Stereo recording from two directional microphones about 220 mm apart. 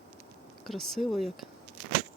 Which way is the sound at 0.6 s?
Centre (ahead or behind).